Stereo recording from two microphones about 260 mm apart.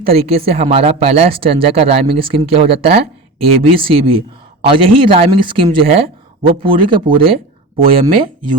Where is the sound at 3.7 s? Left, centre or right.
Centre.